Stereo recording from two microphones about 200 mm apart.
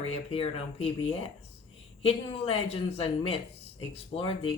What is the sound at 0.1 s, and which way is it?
Speech, 30° left (ahead or behind).